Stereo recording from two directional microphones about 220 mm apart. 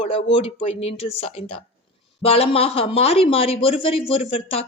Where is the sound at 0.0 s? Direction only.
25° left (ahead or behind).